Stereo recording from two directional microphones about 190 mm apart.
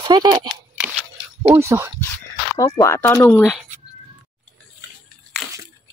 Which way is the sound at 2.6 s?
15° left (ahead or behind).